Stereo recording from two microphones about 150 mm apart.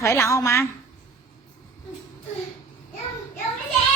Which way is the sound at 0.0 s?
20° left (ahead or behind).